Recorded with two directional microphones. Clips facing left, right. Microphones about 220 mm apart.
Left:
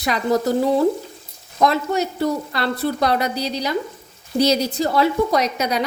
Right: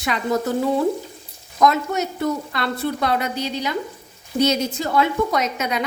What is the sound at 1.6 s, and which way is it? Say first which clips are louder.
A woman's voice: even; 30° left (ahead or behind).